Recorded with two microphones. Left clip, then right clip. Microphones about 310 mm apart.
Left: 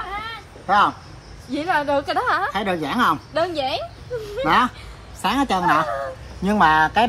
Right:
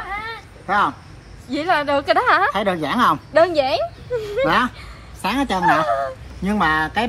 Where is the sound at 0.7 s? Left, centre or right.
Centre.